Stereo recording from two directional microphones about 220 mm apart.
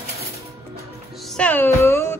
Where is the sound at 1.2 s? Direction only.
5° left (ahead or behind).